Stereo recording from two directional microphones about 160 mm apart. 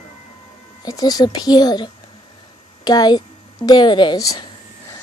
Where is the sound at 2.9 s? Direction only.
25° left (ahead or behind).